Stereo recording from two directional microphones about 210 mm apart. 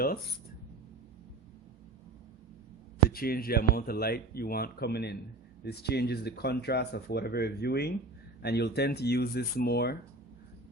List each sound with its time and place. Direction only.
3.1 s speech: 45° left (ahead or behind)